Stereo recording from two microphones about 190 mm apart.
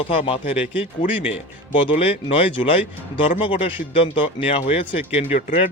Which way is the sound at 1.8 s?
30° left (ahead or behind).